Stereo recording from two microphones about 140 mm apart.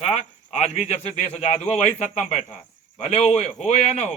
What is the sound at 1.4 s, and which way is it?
Speech, 50° left (ahead or behind).